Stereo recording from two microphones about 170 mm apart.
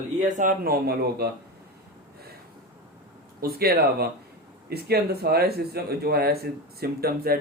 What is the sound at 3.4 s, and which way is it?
Speech, 65° right (ahead or behind).